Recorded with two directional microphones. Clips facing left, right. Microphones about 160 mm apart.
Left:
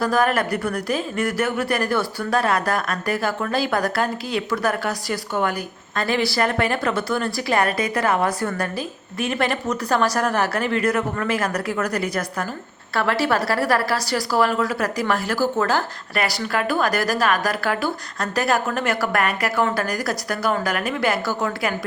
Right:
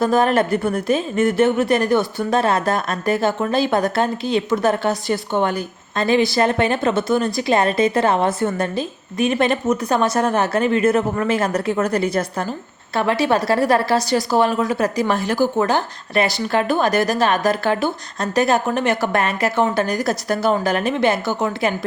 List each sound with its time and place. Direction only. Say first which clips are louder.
0.0 s a woman's voice: right 4 dB; 25° right (ahead or behind)